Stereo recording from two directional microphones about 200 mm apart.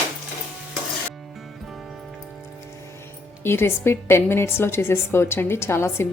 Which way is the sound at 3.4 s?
10° left (ahead or behind).